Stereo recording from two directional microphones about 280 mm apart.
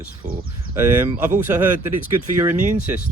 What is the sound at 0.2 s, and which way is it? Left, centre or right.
Speech, right.